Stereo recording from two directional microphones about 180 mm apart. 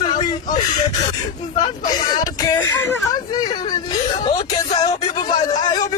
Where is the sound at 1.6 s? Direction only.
20° left (ahead or behind).